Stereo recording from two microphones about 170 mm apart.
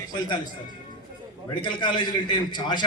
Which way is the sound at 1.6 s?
25° left (ahead or behind).